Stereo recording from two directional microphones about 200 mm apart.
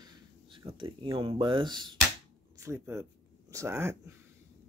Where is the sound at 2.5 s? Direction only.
15° right (ahead or behind).